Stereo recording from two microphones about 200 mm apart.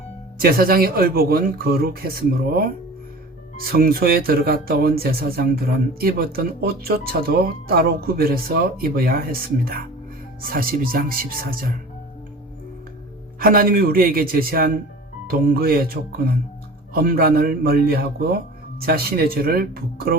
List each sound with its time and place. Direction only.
0.4 s speech: 50° right (ahead or behind)
13.4 s speech: 45° right (ahead or behind)